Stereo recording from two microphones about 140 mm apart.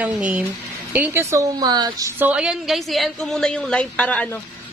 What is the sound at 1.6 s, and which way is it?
Speech, 30° right (ahead or behind).